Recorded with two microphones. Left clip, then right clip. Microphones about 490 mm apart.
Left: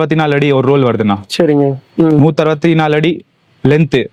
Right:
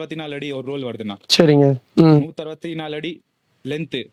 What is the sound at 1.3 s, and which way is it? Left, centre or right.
Speech, right.